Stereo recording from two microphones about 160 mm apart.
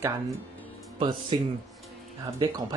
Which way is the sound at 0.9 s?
30° right (ahead or behind).